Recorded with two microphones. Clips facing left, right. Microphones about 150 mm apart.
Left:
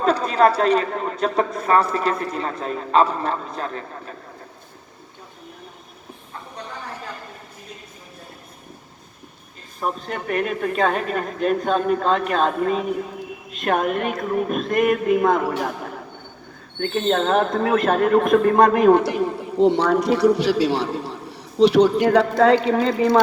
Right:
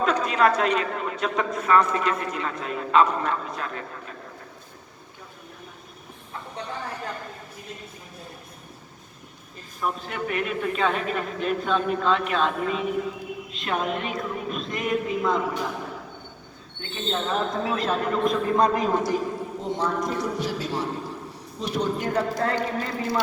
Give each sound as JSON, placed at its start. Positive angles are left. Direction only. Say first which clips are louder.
{"t": 0.0, "sound": "a man's voice", "louder": "left 4 dB", "side_deg": 35}
{"t": 9.8, "sound": "a woman's voice", "louder": "left 2 dB", "side_deg": 45}
{"t": 16.8, "sound": "a man's voice", "louder": "left 9 dB", "side_deg": 55}